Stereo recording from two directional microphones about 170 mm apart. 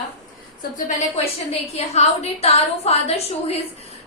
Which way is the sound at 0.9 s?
35° left (ahead or behind).